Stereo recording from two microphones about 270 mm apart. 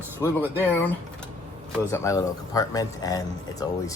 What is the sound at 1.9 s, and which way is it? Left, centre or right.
Speech, centre.